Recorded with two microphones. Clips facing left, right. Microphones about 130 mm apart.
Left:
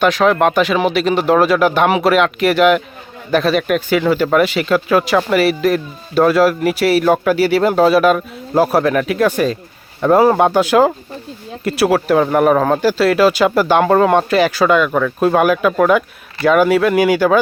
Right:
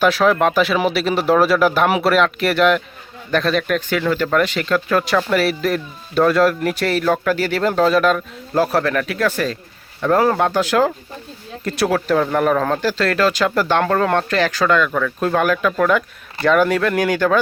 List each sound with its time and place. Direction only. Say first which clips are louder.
0.0 s speech: left 2 dB; 5° right (ahead or behind)